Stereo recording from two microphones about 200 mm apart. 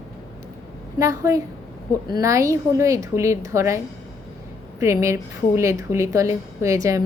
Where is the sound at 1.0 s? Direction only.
15° right (ahead or behind).